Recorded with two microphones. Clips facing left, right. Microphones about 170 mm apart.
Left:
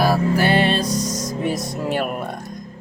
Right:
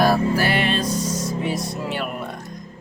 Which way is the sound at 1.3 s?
45° left (ahead or behind).